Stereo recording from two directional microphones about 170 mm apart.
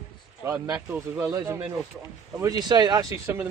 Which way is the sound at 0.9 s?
15° right (ahead or behind).